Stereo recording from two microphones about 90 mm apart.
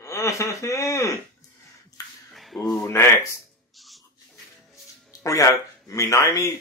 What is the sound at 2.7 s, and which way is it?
Speech, 30° left (ahead or behind).